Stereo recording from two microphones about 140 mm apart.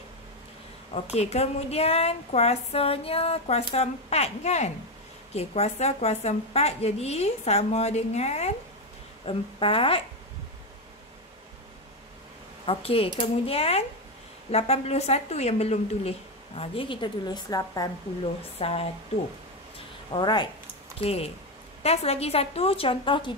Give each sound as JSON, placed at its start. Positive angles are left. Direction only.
{"t": 1.1, "sound": "speech", "side_deg": 50}
{"t": 12.6, "sound": "speech", "side_deg": 40}
{"t": 18.6, "sound": "speech", "side_deg": 45}
{"t": 20.1, "sound": "speech", "side_deg": 35}
{"t": 21.0, "sound": "speech", "side_deg": 45}